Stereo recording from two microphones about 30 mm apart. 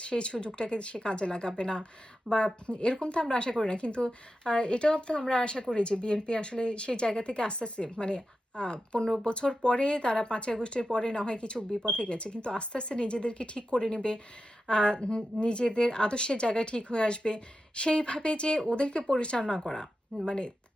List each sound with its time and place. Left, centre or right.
0.0 s speech: left
19.4 s speech: centre
20.2 s speech: left